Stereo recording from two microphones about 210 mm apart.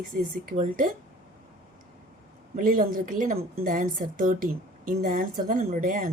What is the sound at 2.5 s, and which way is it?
Speech, 40° right (ahead or behind).